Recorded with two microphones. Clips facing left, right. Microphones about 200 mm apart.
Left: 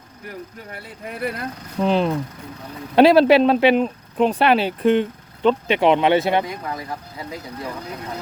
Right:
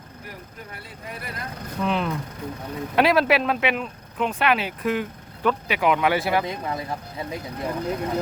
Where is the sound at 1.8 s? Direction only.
30° left (ahead or behind).